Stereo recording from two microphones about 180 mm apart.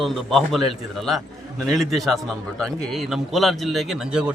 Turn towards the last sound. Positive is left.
turn(degrees=-5)  # may be behind; listen again after turning